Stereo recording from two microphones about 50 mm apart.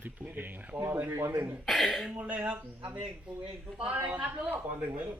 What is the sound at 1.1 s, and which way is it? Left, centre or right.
Speech, right.